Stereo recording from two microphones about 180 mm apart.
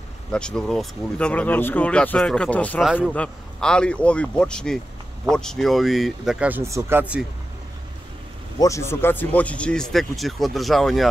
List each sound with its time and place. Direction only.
0.3 s speech: 5° left (ahead or behind)
2.8 s speech: 5° right (ahead or behind)
3.2 s speech: 5° left (ahead or behind)
8.5 s speech: 15° left (ahead or behind); by 11.1 s centre (ahead or behind)